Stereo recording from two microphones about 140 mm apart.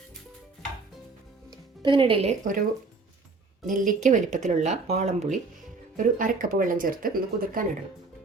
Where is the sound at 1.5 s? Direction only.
35° right (ahead or behind).